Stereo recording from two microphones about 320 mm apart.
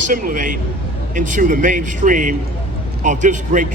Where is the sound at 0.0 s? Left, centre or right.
Right.